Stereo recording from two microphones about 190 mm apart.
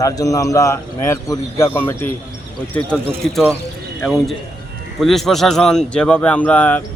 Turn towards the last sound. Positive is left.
turn(degrees=10)  # may be behind; listen again after turning